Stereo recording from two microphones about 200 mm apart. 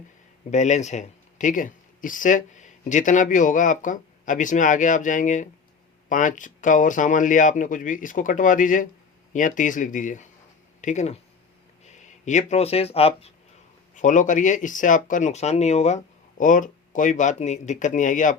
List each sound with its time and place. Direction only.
0.5 s speech: 35° left (ahead or behind)